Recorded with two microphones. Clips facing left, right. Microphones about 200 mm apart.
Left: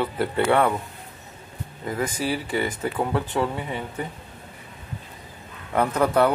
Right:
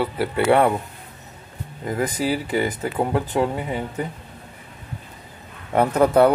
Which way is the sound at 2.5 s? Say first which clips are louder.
Right 3 dB; 35° right (ahead or behind).